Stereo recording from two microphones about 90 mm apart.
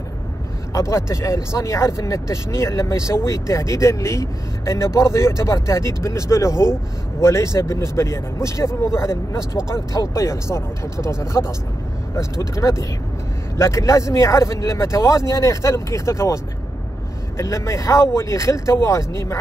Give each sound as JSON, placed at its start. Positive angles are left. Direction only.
{"t": 0.7, "sound": "speech", "side_deg": 30}
{"t": 17.4, "sound": "speech", "side_deg": 30}